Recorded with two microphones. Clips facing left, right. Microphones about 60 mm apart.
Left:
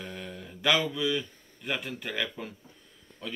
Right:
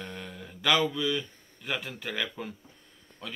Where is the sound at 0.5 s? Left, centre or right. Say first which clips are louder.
Right 1 dB; centre.